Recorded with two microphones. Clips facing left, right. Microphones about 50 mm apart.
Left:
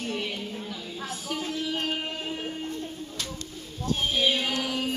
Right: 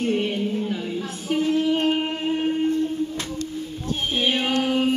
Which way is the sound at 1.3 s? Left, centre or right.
Right.